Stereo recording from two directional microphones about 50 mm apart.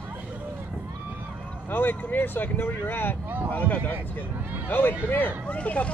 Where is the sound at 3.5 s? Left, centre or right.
Left.